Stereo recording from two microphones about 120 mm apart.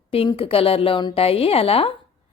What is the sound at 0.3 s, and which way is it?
A woman's voice, 50° left (ahead or behind).